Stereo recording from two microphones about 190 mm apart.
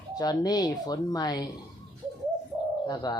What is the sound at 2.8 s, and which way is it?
Speech, 20° left (ahead or behind).